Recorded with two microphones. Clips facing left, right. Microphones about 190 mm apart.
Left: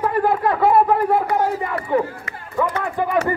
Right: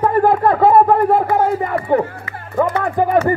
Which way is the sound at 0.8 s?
50° right (ahead or behind).